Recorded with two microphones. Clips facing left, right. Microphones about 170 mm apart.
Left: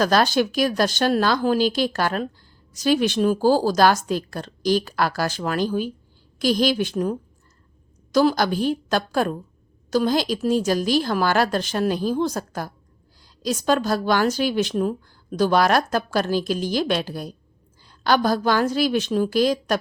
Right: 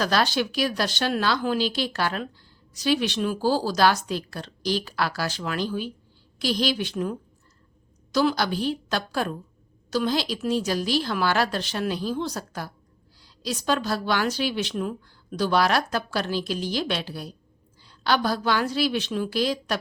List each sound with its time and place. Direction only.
0.0 s a woman's voice: 45° left (ahead or behind)